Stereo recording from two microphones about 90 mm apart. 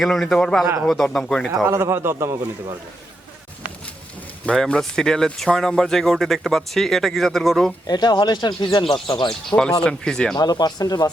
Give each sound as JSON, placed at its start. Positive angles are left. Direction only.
{"t": 0.0, "sound": "a man's voice", "side_deg": 5}
{"t": 1.6, "sound": "a man's voice", "side_deg": -30}
{"t": 4.4, "sound": "speech", "side_deg": 5}
{"t": 7.9, "sound": "speech", "side_deg": 50}
{"t": 8.8, "sound": "speech", "side_deg": 65}
{"t": 9.8, "sound": "a man's voice", "side_deg": 5}
{"t": 10.3, "sound": "speech", "side_deg": 50}